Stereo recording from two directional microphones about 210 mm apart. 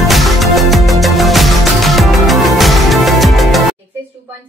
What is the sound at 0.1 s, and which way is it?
Music, centre (ahead or behind).